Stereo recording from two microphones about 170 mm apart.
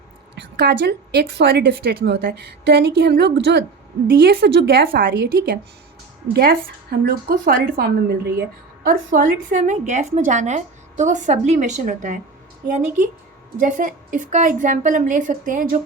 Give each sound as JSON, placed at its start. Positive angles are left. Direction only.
{"t": 0.3, "sound": "a woman's voice", "side_deg": -80}
{"t": 4.0, "sound": "a woman's voice", "side_deg": -65}
{"t": 13.6, "sound": "a woman's voice", "side_deg": -50}